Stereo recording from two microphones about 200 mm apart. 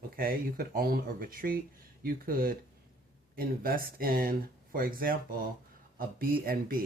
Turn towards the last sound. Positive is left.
turn(degrees=-50)  # may be behind; listen again after turning